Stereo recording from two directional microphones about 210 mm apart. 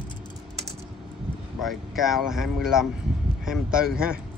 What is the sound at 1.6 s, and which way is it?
Speech, centre (ahead or behind).